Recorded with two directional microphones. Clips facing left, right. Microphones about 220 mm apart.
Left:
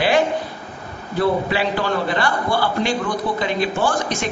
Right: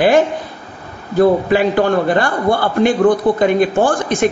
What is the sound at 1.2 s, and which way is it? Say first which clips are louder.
A man's voice: right 7 dB; 50° right (ahead or behind).